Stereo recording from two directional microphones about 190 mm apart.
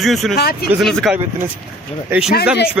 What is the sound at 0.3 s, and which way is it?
Speech, 55° left (ahead or behind).